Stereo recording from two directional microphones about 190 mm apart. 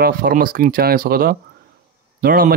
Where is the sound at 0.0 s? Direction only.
50° right (ahead or behind).